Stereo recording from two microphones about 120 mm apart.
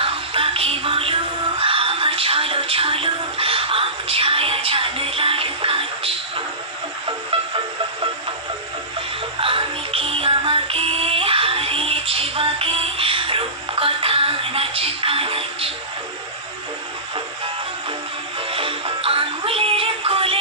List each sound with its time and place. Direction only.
0.0 s music: 50° right (ahead or behind)
9.4 s music: 50° right (ahead or behind)
18.5 s music: 50° right (ahead or behind)